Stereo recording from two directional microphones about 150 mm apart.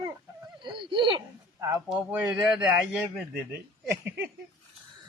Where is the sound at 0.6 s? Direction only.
30° right (ahead or behind).